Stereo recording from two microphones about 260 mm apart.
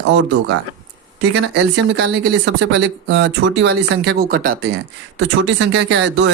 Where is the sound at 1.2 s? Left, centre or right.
Right.